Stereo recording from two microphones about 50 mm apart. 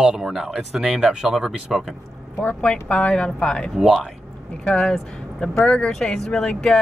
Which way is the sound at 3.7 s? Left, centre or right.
Centre.